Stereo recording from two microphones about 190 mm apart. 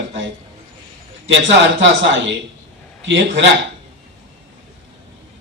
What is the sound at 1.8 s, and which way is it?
A man's voice, 70° right (ahead or behind).